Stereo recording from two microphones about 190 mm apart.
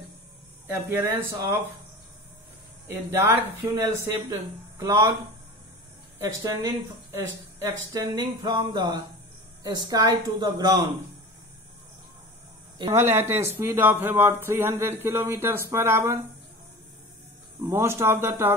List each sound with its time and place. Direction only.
0.7 s speech: 10° right (ahead or behind)
3.1 s speech: 15° right (ahead or behind)
6.1 s a woman's voice: 15° right (ahead or behind)
12.7 s speech: 20° right (ahead or behind)
17.6 s speech: 15° right (ahead or behind)